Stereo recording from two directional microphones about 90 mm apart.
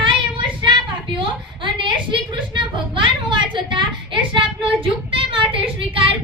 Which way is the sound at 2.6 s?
70° right (ahead or behind).